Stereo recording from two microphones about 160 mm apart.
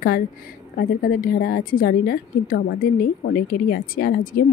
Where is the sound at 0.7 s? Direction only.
65° left (ahead or behind).